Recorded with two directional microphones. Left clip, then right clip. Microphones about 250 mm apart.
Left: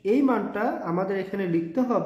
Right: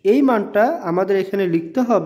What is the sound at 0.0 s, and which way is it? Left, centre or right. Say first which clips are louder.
A woman's voice: right 7 dB; right.